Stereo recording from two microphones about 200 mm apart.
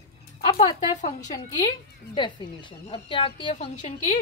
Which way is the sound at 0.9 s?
40° left (ahead or behind).